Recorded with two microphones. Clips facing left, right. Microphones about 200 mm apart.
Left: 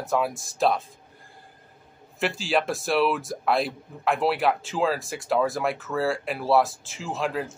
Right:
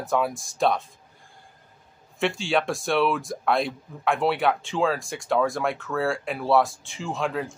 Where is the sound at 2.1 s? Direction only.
Centre (ahead or behind).